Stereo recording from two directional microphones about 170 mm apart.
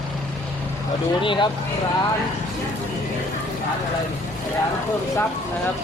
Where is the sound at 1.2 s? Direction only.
30° left (ahead or behind).